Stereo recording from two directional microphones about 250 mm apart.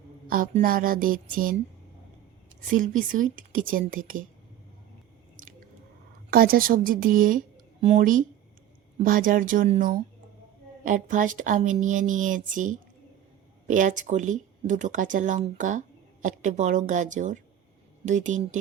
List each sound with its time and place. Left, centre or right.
0.3 s speech: right
2.6 s speech: right
6.3 s a woman's voice: right